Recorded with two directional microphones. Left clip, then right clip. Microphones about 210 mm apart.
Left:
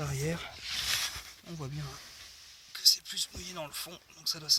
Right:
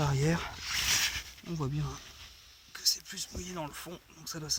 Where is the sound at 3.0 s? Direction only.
15° left (ahead or behind).